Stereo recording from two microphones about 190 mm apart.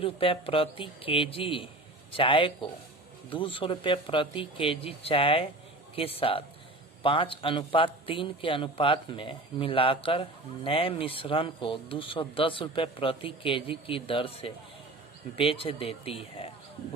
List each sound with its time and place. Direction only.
0.0 s a man's voice: 30° left (ahead or behind)